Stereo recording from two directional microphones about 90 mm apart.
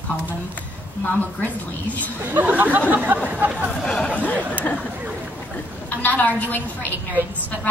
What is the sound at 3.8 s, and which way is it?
Speech, 5° left (ahead or behind).